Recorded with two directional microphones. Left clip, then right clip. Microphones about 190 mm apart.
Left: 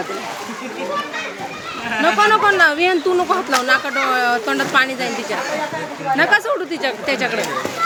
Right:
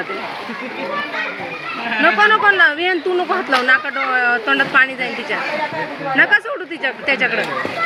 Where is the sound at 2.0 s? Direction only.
5° left (ahead or behind).